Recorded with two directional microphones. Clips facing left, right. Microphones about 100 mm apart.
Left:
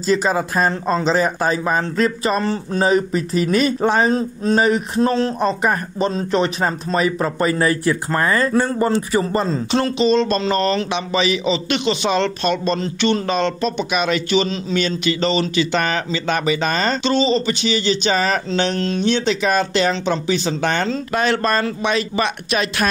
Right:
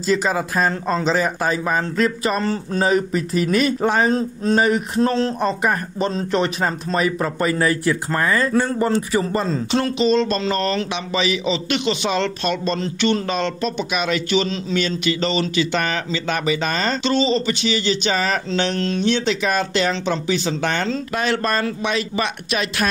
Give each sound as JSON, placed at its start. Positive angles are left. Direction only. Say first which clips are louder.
{"t": 0.0, "sound": "speech", "louder": "left 2 dB", "side_deg": 35}
{"t": 0.7, "sound": "speech", "louder": "left 2 dB", "side_deg": 25}
{"t": 11.4, "sound": "speech", "louder": "left 2 dB", "side_deg": 25}
{"t": 17.0, "sound": "speech", "louder": "even", "side_deg": 20}
{"t": 21.1, "sound": "speech", "louder": "left 4 dB", "side_deg": 40}
{"t": 21.6, "sound": "speech", "louder": "left 2 dB", "side_deg": 35}